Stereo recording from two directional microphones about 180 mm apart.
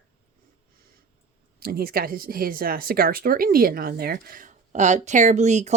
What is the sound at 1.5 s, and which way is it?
Speech, 55° right (ahead or behind).